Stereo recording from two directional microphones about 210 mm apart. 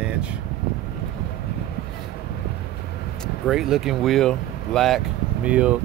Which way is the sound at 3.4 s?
Centre (ahead or behind).